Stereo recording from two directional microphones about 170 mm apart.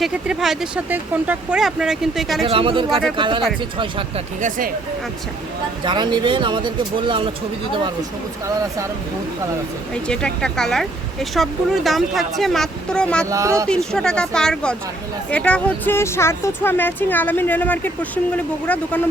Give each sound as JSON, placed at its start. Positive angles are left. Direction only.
{"t": 0.0, "sound": "speech", "side_deg": -5}
{"t": 2.5, "sound": "speech", "side_deg": -30}
{"t": 4.4, "sound": "speech", "side_deg": -50}
{"t": 5.8, "sound": "speech", "side_deg": -25}
{"t": 9.9, "sound": "speech", "side_deg": 5}
{"t": 13.3, "sound": "speech", "side_deg": -20}
{"t": 13.7, "sound": "speech", "side_deg": 5}